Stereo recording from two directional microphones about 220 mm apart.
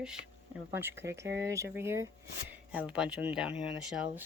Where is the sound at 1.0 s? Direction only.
15° right (ahead or behind).